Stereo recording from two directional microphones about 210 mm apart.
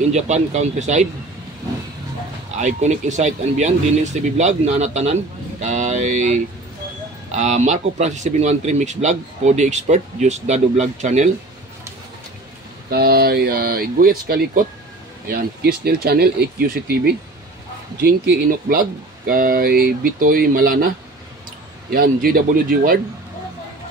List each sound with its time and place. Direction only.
0.1 s speech: 30° right (ahead or behind)
2.6 s speech: 35° right (ahead or behind)
12.9 s speech: 50° right (ahead or behind)
21.9 s speech: 45° right (ahead or behind)